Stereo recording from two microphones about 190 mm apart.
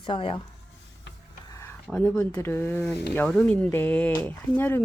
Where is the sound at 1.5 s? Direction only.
10° left (ahead or behind).